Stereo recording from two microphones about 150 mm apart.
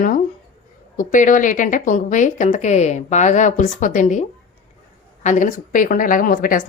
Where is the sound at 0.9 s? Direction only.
60° left (ahead or behind).